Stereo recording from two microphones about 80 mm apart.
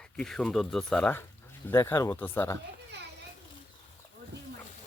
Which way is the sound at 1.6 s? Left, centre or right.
Left.